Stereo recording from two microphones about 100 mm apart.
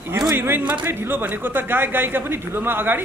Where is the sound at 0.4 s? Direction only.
20° right (ahead or behind).